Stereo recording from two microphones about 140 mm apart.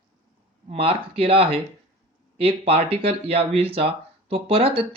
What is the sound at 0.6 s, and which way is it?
Speech, 45° right (ahead or behind).